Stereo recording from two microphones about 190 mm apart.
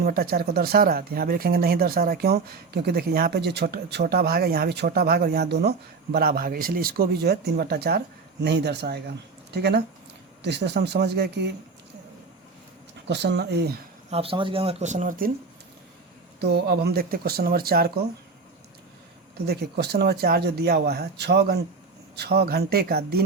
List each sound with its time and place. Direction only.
0.0 s speech: 50° right (ahead or behind)
13.1 s speech: 65° right (ahead or behind)
14.1 s speech: 30° right (ahead or behind); by 15.3 s 45° right (ahead or behind)
16.4 s speech: 60° right (ahead or behind)
19.5 s speech: 60° right (ahead or behind)